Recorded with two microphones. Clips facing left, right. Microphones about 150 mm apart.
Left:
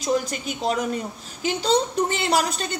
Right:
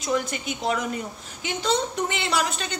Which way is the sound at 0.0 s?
35° left (ahead or behind).